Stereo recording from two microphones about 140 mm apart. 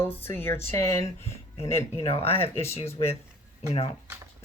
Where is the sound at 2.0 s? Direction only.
45° left (ahead or behind).